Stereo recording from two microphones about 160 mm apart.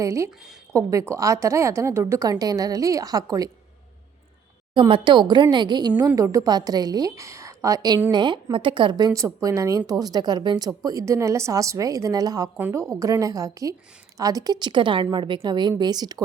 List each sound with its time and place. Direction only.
0.0 s a woman's voice: 20° right (ahead or behind)
4.7 s a woman's voice: 30° right (ahead or behind)
12.5 s a woman's voice: 10° right (ahead or behind)